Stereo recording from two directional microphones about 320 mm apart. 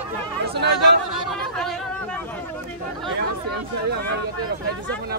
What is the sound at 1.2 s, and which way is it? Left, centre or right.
Chatter, centre.